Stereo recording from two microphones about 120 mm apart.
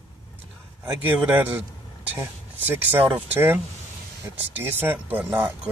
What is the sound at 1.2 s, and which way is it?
Speech, 20° right (ahead or behind).